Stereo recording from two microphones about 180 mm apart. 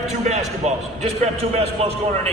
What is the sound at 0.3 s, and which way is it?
A man's voice, 35° right (ahead or behind).